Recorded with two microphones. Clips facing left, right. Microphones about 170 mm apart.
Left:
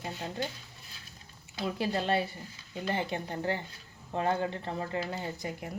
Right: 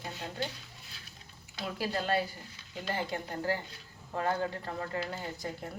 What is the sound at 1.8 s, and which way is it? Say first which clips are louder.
Speech: left 1 dB; 25° left (ahead or behind).